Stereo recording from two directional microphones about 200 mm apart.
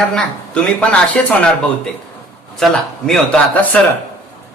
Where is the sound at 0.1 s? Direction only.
5° left (ahead or behind).